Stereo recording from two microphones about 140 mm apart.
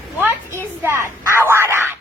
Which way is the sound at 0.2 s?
15° right (ahead or behind).